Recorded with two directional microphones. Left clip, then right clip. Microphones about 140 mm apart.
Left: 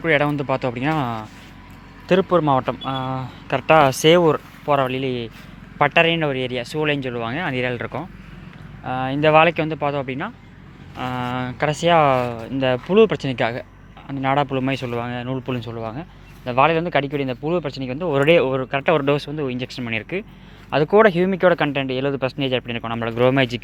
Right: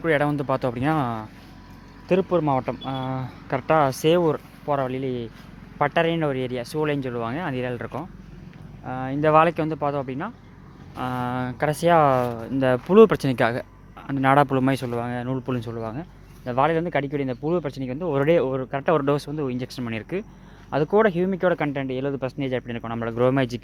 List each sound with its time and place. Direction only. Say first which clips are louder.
0.0 s speech: left 3 dB; 25° right (ahead or behind)
2.0 s speech: left 4 dB; 20° right (ahead or behind); by 3.6 s 35° right (ahead or behind)
3.6 s speech: left 6 dB; 15° right (ahead or behind); by 14.8 s 45° right (ahead or behind)
14.8 s speech: left 2 dB; 30° right (ahead or behind)